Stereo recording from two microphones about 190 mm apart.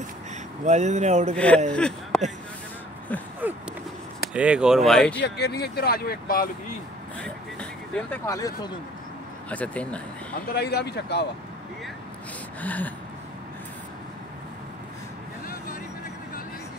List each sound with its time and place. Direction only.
0.7 s speech: 40° right (ahead or behind)
1.3 s speech: 5° left (ahead or behind)
4.3 s speech: 5° right (ahead or behind)
5.2 s speech: 60° left (ahead or behind)
8.3 s speech: 20° left (ahead or behind)
9.5 s speech: 5° left (ahead or behind)
10.5 s speech: 55° left (ahead or behind)
12.6 s speech: 10° left (ahead or behind)